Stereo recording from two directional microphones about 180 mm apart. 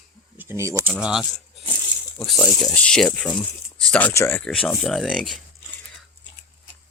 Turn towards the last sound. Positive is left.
turn(degrees=0)  # may be behind; listen again after turning